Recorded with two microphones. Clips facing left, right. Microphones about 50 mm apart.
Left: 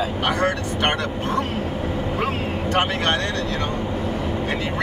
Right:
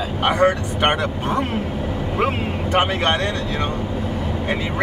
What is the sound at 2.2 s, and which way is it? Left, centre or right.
Vehicle, centre.